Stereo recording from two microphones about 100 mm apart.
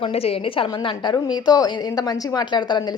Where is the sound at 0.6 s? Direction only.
50° left (ahead or behind).